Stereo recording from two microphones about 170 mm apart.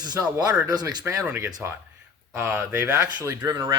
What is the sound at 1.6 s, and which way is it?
Speech, 10° right (ahead or behind).